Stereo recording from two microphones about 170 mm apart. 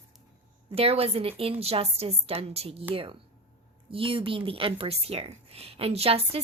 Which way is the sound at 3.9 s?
30° right (ahead or behind).